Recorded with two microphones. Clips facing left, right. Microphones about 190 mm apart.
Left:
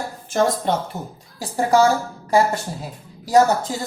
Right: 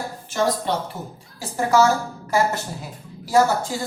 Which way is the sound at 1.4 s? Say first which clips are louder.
Left 2 dB; 35° left (ahead or behind).